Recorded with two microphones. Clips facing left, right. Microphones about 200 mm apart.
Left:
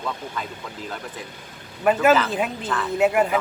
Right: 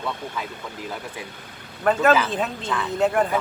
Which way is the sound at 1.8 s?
10° left (ahead or behind).